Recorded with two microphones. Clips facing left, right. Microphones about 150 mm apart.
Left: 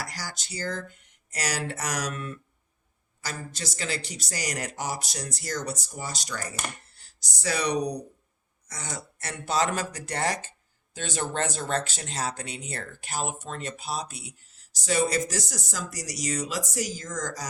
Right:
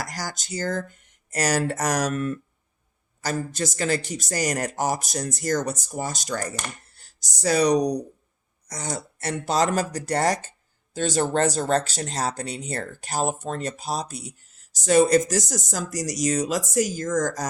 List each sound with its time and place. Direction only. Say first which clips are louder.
0.0 s a man's voice: right 5 dB; 45° right (ahead or behind)